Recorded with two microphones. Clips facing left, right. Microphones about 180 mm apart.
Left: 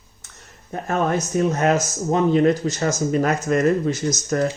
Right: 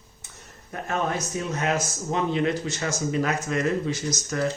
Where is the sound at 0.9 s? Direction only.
45° left (ahead or behind).